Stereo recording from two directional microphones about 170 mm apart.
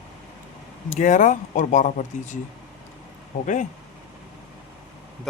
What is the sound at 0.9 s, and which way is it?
Speech, 50° left (ahead or behind).